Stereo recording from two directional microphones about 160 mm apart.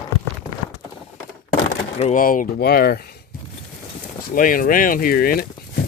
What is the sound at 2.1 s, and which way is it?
Speech, 60° left (ahead or behind).